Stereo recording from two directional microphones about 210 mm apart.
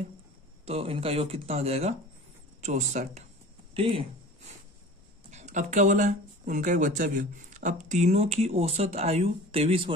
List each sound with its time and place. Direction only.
0.7 s speech: 30° right (ahead or behind)
5.3 s speech: 35° right (ahead or behind)